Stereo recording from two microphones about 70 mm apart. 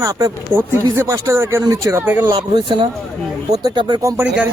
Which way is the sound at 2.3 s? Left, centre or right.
Right.